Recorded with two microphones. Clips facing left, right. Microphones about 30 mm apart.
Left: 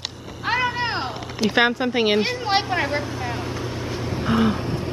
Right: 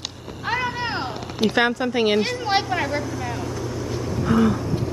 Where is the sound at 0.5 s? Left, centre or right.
Left.